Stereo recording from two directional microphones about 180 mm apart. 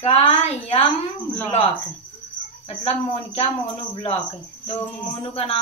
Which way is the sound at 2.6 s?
35° left (ahead or behind).